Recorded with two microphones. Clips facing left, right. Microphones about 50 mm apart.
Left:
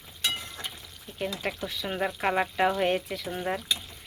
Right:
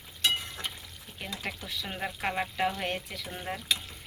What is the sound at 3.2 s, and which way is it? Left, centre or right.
Speech, centre.